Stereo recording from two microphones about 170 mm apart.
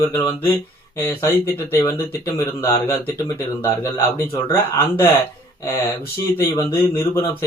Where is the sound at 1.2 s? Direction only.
15° left (ahead or behind).